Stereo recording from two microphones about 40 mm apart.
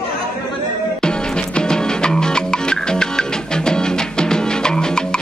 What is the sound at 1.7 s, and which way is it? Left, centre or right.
Music, centre.